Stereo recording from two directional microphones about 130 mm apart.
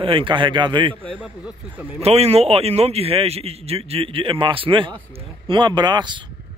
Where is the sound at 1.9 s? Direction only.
50° right (ahead or behind); by 6.2 s 35° right (ahead or behind).